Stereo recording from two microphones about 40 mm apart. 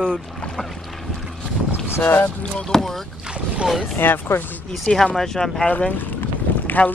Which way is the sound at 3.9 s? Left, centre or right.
Left.